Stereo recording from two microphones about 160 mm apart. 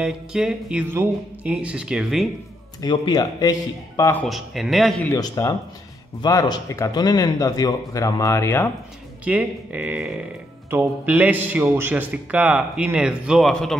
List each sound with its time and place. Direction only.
0.0 s speech: 5° right (ahead or behind)
2.8 s speech: 25° left (ahead or behind)
4.3 s speech: centre (ahead or behind)
5.0 s speech: 20° left (ahead or behind)
9.2 s a man's voice: 10° right (ahead or behind)